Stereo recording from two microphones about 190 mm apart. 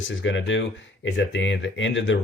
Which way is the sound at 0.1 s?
80° left.